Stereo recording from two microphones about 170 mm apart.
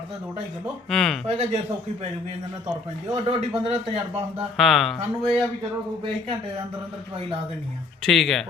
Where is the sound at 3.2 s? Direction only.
35° right (ahead or behind).